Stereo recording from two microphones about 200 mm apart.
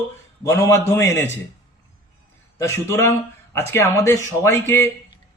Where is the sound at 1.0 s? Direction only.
15° left (ahead or behind).